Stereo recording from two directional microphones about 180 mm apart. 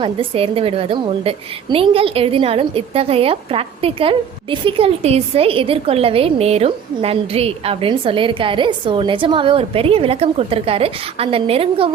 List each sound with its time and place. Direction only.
0.0 s a woman's voice: 30° right (ahead or behind)